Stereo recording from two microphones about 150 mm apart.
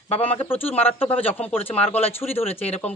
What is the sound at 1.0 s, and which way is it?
Speech, 40° left (ahead or behind).